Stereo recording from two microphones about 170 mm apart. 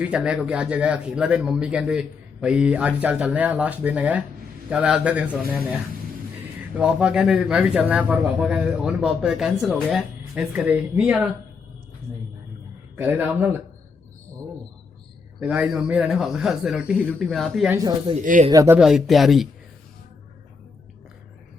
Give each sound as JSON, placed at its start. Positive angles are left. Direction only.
{"t": 0.0, "sound": "a man's voice", "side_deg": -5}
{"t": 6.7, "sound": "a man's voice", "side_deg": -5}
{"t": 13.0, "sound": "a man's voice", "side_deg": -10}
{"t": 15.4, "sound": "a man's voice", "side_deg": -5}
{"t": 18.2, "sound": "speech", "side_deg": -50}
{"t": 18.5, "sound": "a man's voice", "side_deg": -15}
{"t": 18.8, "sound": "a man's voice", "side_deg": 0}